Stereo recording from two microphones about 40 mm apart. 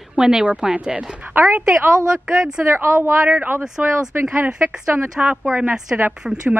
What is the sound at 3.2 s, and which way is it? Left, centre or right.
Speech, right.